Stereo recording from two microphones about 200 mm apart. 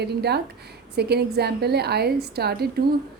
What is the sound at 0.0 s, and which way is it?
A woman's voice, 55° right (ahead or behind).